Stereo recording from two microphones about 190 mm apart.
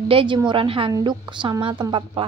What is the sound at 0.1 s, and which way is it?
A woman's voice, 25° right (ahead or behind).